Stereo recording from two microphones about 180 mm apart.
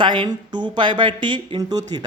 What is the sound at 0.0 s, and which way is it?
A woman's voice, 25° right (ahead or behind).